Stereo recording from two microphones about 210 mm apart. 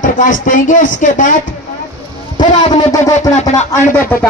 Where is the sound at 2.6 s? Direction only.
30° left (ahead or behind).